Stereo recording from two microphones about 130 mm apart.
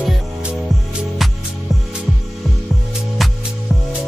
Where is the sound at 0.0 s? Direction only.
5° right (ahead or behind).